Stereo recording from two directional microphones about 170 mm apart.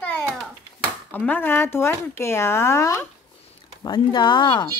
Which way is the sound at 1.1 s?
10° left (ahead or behind).